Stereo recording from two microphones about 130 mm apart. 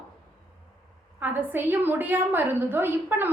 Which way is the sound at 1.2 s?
15° right (ahead or behind).